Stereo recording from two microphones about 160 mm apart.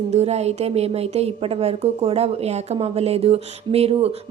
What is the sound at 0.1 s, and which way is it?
A woman's voice, 40° right (ahead or behind).